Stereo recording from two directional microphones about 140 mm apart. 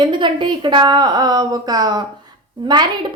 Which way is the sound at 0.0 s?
35° right (ahead or behind).